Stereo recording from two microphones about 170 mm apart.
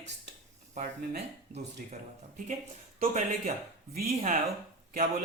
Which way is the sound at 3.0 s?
45° right (ahead or behind).